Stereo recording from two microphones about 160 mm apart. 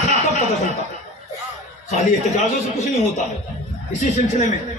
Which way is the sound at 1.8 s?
45° left (ahead or behind).